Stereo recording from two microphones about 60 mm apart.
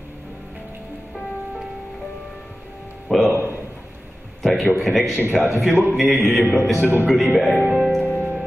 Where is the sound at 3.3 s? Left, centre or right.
Right.